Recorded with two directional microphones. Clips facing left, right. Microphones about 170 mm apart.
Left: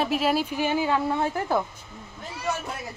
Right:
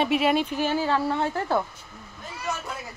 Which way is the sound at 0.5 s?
15° left (ahead or behind).